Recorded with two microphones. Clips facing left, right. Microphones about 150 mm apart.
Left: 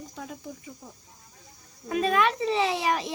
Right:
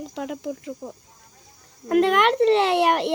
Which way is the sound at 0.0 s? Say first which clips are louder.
Right 9 dB; 80° right.